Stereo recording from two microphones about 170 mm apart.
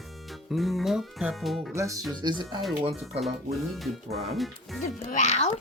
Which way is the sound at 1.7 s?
20° right (ahead or behind).